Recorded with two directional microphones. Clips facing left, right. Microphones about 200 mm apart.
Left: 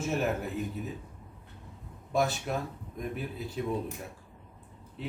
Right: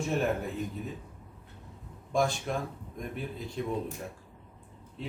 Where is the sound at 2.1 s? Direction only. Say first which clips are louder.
Even; 5° left (ahead or behind).